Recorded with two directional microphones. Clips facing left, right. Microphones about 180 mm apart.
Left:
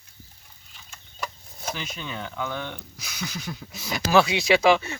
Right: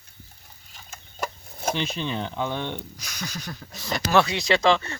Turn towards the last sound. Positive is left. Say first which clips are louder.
# left 2 dB
turn(degrees=10)  # may be behind; listen again after turning